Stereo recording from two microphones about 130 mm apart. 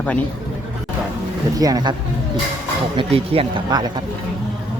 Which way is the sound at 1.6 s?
30° right (ahead or behind).